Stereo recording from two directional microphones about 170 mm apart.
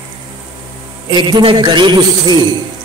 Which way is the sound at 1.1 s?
25° right (ahead or behind).